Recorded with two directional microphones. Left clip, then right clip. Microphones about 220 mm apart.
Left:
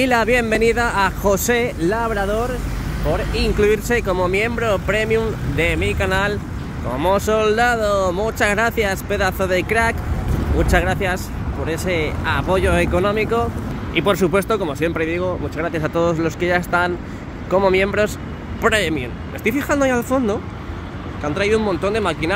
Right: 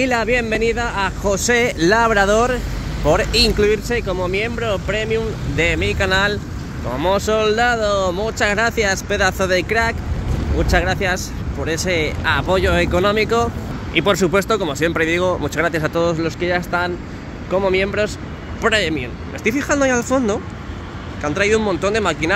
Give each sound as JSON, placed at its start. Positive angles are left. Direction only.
{"t": 0.0, "sound": "speech", "side_deg": 5}
{"t": 1.5, "sound": "speech", "side_deg": -5}
{"t": 3.4, "sound": "speech", "side_deg": 0}
{"t": 5.7, "sound": "speech", "side_deg": 0}
{"t": 15.7, "sound": "speech", "side_deg": 0}